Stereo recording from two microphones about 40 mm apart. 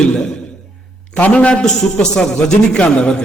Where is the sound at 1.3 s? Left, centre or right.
Left.